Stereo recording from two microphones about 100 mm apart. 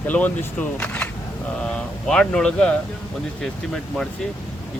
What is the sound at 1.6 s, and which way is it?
Speech, 5° left (ahead or behind).